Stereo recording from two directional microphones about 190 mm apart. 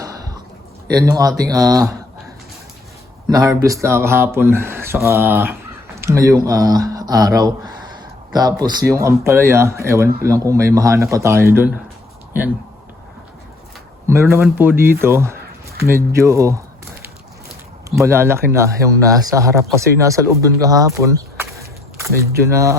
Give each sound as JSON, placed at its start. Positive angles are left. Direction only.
{"t": 0.9, "sound": "speech", "side_deg": -20}
{"t": 3.2, "sound": "speech", "side_deg": -20}
{"t": 14.1, "sound": "speech", "side_deg": -15}
{"t": 18.0, "sound": "speech", "side_deg": -15}